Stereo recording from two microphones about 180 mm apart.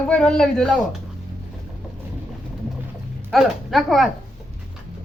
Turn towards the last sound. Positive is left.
turn(degrees=0)  # may be behind; listen again after turning